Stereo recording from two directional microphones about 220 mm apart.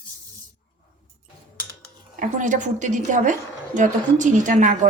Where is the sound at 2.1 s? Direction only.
35° right (ahead or behind).